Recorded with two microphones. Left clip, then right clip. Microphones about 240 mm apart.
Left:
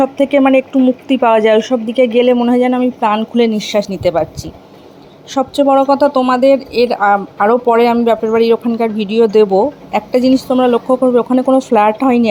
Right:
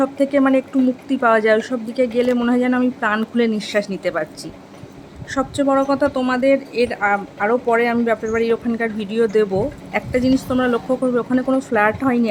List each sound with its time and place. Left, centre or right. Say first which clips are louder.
0.3 s a woman's voice: left 7 dB; centre
5.3 s a woman's voice: left 7 dB; centre